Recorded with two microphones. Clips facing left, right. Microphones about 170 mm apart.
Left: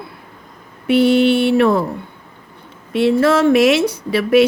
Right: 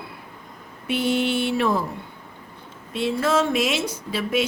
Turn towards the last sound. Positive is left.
turn(degrees=65)  # may be behind; listen again after turning